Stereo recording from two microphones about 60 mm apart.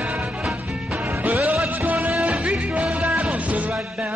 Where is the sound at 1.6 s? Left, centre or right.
Right.